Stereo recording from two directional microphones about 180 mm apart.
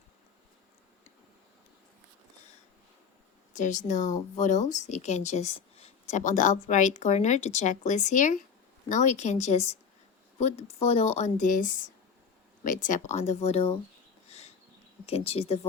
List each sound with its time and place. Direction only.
3.5 s a woman's voice: 45° left (ahead or behind)
14.3 s a sound: 35° left (ahead or behind)
15.0 s speech: 35° left (ahead or behind)